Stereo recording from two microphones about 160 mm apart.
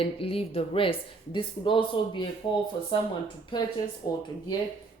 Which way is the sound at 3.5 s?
30° left (ahead or behind).